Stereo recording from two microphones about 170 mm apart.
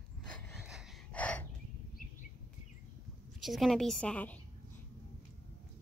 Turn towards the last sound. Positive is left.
turn(degrees=10)  # may be behind; listen again after turning